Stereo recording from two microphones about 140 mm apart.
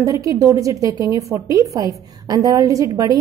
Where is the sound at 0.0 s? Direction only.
25° right (ahead or behind).